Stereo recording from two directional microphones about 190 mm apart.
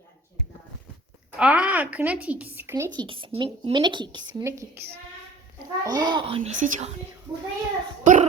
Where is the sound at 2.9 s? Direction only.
25° right (ahead or behind).